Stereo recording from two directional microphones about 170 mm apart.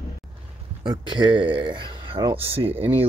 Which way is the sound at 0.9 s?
30° right (ahead or behind).